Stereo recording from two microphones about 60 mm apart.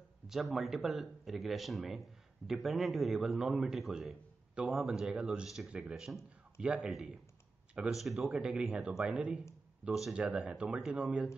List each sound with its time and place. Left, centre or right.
0.3 s speech: centre
4.8 s a man's voice: centre
7.9 s speech: centre
8.3 s a man's voice: centre
10.1 s speech: right
10.8 s a man's voice: centre